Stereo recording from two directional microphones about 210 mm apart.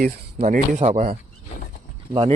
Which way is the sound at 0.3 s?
35° right (ahead or behind).